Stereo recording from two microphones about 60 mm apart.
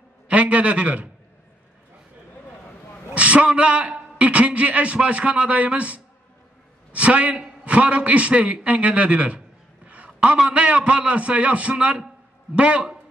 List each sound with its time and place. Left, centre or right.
0.3 s a man's voice: right
3.2 s a man's voice: right
9.8 s a sound: right
10.5 s a man's voice: right